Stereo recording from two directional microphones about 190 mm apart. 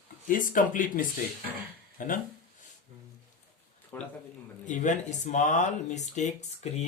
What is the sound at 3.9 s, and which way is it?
Speech, 10° left (ahead or behind).